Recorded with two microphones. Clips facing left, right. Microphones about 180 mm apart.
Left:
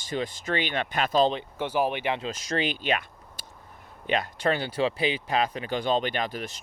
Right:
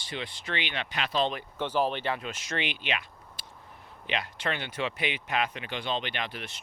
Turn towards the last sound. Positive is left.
turn(degrees=40)  # may be behind; listen again after turning